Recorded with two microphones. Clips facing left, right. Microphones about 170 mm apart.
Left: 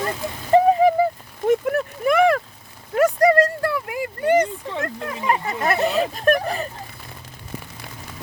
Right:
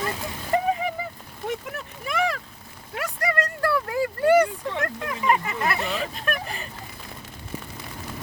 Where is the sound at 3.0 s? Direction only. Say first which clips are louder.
Left 12 dB; 40° left (ahead or behind).